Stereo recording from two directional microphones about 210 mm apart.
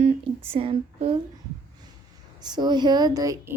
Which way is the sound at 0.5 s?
25° right (ahead or behind).